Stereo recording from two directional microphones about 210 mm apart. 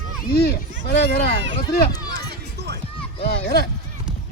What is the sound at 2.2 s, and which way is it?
Music, 50° right (ahead or behind).